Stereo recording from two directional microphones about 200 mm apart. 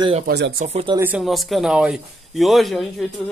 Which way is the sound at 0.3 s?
60° right (ahead or behind).